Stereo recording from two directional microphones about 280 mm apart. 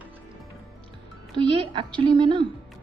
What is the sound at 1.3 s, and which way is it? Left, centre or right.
A woman's voice, centre.